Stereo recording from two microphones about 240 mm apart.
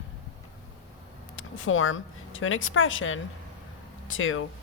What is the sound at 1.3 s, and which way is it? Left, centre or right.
Speech, left.